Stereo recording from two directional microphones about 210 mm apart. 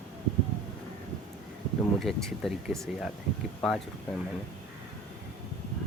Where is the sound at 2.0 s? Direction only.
Centre (ahead or behind).